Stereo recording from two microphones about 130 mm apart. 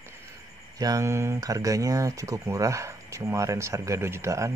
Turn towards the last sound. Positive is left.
turn(degrees=-20)  # may be behind; listen again after turning